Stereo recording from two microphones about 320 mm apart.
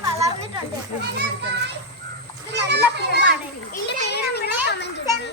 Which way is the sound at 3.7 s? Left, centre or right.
Left.